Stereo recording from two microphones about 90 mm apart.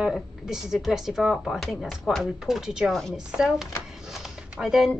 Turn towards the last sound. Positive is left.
turn(degrees=-5)  # may be behind; listen again after turning